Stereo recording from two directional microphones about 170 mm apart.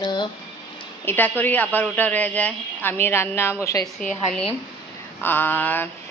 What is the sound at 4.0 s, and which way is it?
A woman's voice, 5° left (ahead or behind).